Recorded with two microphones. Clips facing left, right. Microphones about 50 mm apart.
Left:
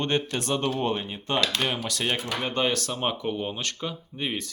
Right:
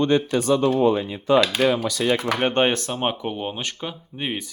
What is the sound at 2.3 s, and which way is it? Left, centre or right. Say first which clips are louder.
Speech: right 8 dB; right.